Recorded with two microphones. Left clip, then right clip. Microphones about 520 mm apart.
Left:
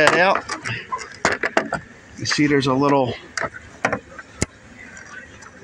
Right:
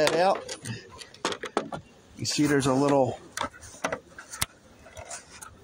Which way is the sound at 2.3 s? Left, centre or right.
Right.